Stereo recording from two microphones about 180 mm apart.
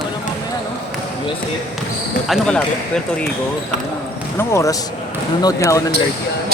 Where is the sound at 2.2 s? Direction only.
Centre (ahead or behind).